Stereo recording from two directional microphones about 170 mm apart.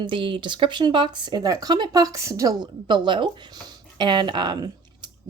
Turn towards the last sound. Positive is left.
turn(degrees=-25)  # may be behind; listen again after turning